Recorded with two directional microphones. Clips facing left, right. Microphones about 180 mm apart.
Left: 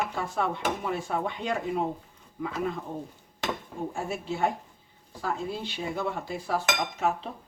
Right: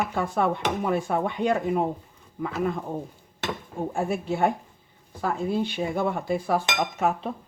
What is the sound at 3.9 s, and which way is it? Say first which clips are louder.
Speech: right 7 dB; 50° right (ahead or behind).